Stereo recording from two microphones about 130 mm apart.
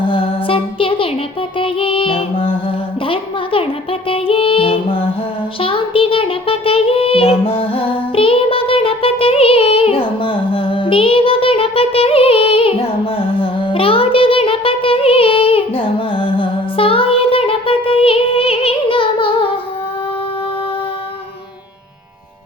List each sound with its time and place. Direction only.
0.1 s music: 45° left (ahead or behind)
3.1 s a woman's voice: 45° left (ahead or behind)
4.1 s music: 45° left (ahead or behind)
5.5 s child singing: 45° left (ahead or behind)
13.1 s music: 40° left (ahead or behind)